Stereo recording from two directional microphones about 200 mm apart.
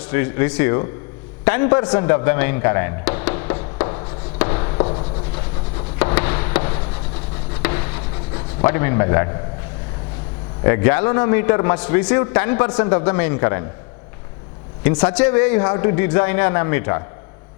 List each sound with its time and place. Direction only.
0.0 s a man's voice: 15° left (ahead or behind)
1.5 s music: 10° left (ahead or behind); by 5.0 s 30° left (ahead or behind)
6.0 s a sound: 10° left (ahead or behind)
7.6 s rub: 15° left (ahead or behind)
10.6 s a man's voice: 15° left (ahead or behind)
14.8 s a man's voice: 10° left (ahead or behind)